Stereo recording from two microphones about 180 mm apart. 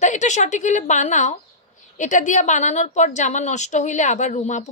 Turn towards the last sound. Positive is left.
turn(degrees=40)  # may be behind; listen again after turning